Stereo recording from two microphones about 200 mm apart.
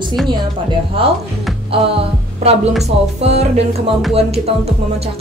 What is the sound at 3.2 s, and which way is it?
Speech, 30° right (ahead or behind).